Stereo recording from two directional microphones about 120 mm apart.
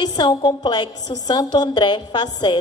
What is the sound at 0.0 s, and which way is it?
A woman's voice, 35° left (ahead or behind).